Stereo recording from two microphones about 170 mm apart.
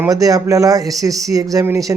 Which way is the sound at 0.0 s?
20° right (ahead or behind).